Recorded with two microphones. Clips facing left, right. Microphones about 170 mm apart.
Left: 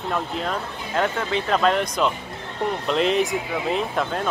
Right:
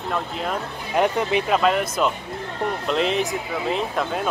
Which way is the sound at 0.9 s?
15° right (ahead or behind).